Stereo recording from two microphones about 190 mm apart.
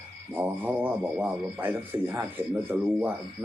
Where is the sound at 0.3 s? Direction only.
10° right (ahead or behind).